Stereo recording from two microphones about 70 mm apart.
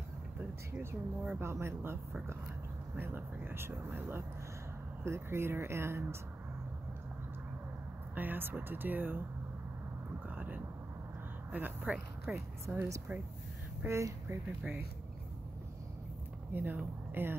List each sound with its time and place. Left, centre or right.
0.7 s speech: centre
1.4 s speech: right
3.0 s speech: right
8.1 s speech: right
10.3 s speech: right
12.6 s speech: right
16.5 s speech: right